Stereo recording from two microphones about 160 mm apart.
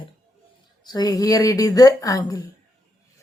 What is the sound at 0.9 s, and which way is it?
Speech, 25° left (ahead or behind).